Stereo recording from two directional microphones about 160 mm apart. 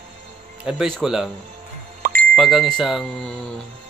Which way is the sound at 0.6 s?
5° right (ahead or behind).